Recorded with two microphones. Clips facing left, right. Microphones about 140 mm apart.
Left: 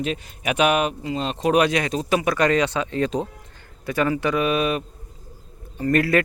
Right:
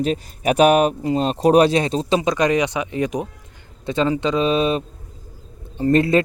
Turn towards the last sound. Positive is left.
turn(degrees=-25)  # may be behind; listen again after turning